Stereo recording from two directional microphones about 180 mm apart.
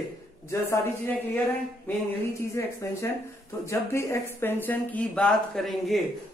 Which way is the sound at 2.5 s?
15° left (ahead or behind).